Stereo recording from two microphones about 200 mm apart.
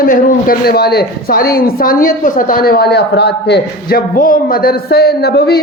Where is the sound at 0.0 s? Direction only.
45° left (ahead or behind).